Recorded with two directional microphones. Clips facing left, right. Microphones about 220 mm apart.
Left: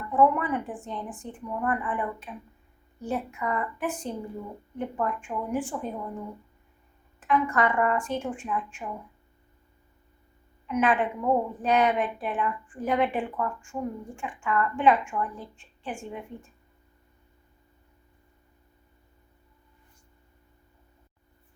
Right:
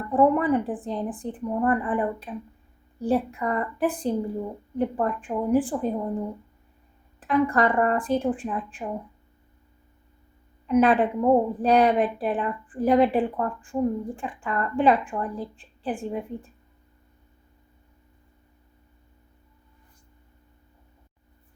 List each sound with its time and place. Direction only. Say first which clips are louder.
0.1 s a woman's voice: right 4 dB; 35° right (ahead or behind)
10.7 s a woman's voice: right 6 dB; 35° right (ahead or behind)